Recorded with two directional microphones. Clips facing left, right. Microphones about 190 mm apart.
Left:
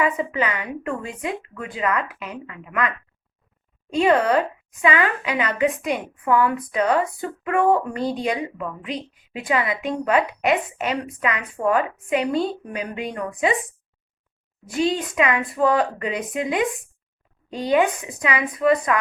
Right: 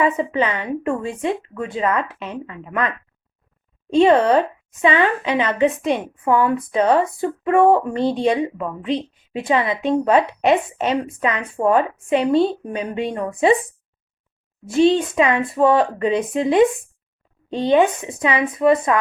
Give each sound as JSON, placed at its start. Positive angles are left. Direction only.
{"t": 0.0, "sound": "speech", "side_deg": -25}
{"t": 14.7, "sound": "speech", "side_deg": -25}